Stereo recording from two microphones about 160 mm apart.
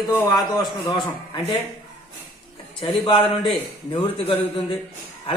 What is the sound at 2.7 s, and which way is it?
A man's voice, 35° left (ahead or behind).